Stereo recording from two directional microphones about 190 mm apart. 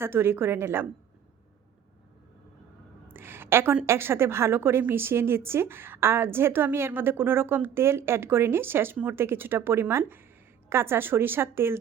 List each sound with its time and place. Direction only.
0.0 s a woman's voice: 10° right (ahead or behind)
3.1 s a woman's voice: 10° right (ahead or behind)